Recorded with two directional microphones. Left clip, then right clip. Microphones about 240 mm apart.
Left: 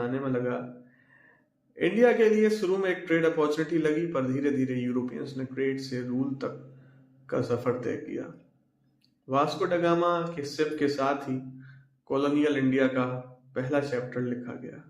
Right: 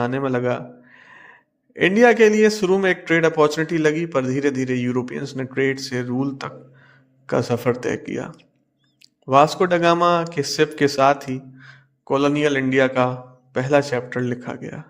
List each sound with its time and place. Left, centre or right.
0.0 s a man's voice: right
1.7 s a man's voice: right